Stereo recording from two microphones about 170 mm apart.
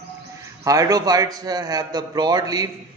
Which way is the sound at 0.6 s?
20° right (ahead or behind).